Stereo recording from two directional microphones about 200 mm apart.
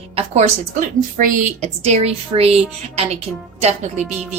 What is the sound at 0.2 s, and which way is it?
A woman's voice, 35° right (ahead or behind).